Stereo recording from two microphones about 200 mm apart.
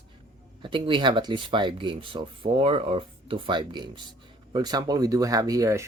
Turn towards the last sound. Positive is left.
turn(degrees=-15)  # may be behind; listen again after turning